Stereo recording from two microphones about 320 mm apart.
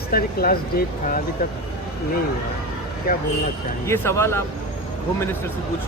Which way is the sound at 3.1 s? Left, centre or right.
Left.